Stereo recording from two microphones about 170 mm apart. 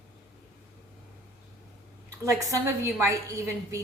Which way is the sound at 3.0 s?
20° right (ahead or behind).